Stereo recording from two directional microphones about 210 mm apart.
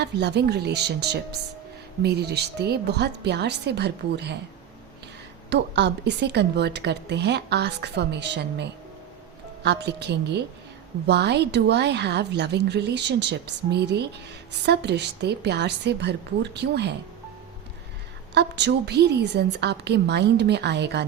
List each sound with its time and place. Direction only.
0.0 s a woman's voice: 55° right (ahead or behind)
5.5 s a woman's voice: 55° right (ahead or behind)
9.6 s a woman's voice: 55° right (ahead or behind)
18.3 s a woman's voice: 55° right (ahead or behind)